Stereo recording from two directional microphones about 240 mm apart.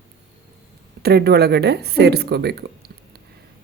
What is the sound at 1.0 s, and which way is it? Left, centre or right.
Speech, right.